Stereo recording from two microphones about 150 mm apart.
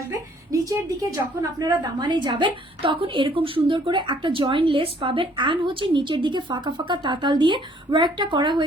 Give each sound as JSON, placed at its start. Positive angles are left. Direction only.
{"t": 0.1, "sound": "a woman's voice", "side_deg": -20}